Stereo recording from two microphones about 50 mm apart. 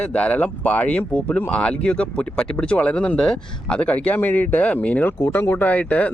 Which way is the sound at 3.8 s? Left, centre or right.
Left.